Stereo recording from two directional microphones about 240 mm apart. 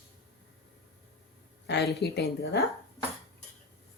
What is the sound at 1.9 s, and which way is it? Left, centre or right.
Speech, left.